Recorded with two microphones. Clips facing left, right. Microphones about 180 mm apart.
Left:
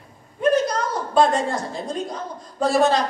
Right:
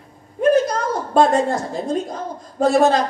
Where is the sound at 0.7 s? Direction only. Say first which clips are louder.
Right 3 dB; 50° right (ahead or behind).